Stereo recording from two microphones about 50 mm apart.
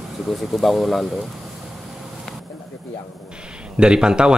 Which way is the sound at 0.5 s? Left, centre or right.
Centre.